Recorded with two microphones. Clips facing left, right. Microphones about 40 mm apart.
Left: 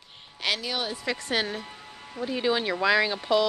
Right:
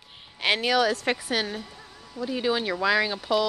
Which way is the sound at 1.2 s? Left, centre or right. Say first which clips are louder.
Even; centre.